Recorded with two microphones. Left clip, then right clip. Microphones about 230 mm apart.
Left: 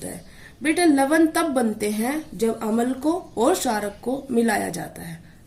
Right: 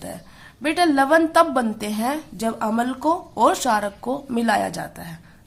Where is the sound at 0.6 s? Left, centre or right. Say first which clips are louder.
Right 1 dB; right.